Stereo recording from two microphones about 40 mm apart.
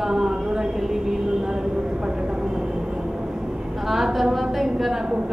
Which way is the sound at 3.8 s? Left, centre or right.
Centre.